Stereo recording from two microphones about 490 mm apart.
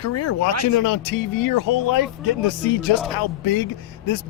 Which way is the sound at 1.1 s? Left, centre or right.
Left.